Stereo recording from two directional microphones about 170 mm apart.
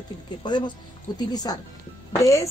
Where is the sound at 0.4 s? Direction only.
25° left (ahead or behind).